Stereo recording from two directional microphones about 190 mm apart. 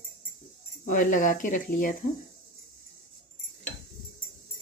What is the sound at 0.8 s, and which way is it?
Speech, 45° left (ahead or behind).